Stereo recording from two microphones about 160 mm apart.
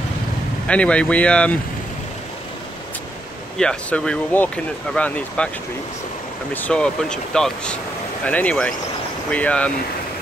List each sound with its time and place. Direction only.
0.7 s speech: 5° left (ahead or behind)
3.5 s speech: 5° left (ahead or behind)
6.5 s speech: 10° left (ahead or behind)